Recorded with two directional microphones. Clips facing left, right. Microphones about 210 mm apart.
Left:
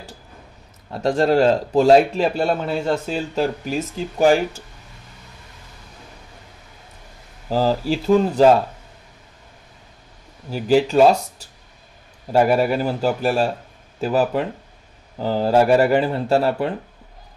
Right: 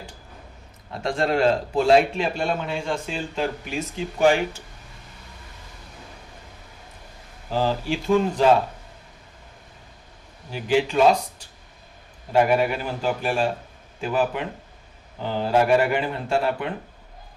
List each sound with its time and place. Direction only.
1.0 s a man's voice: 40° left (ahead or behind)
7.4 s a man's voice: 40° left (ahead or behind)
10.5 s a man's voice: 40° left (ahead or behind)
12.3 s a man's voice: 40° left (ahead or behind)